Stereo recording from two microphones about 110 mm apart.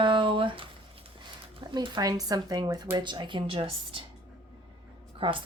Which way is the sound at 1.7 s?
40° right (ahead or behind).